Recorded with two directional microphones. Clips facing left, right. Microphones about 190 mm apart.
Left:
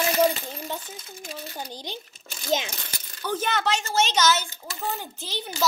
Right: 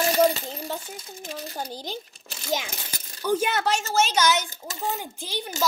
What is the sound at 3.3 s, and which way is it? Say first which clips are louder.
A child's voice: right 2 dB; 10° right (ahead or behind).